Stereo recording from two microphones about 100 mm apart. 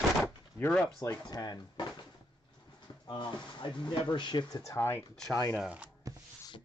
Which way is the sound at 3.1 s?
50° left (ahead or behind).